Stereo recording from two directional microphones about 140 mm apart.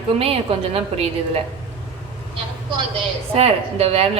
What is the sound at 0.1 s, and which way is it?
A woman's voice, 45° right (ahead or behind).